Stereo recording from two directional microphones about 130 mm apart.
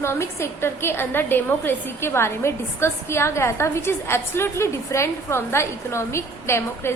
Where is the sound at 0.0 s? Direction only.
20° left (ahead or behind).